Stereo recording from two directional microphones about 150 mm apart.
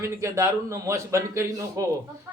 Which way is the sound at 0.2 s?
20° right (ahead or behind).